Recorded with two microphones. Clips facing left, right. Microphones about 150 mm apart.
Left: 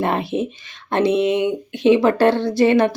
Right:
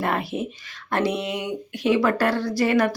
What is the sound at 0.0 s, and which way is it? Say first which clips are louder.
Speech: left 5 dB; 25° left (ahead or behind).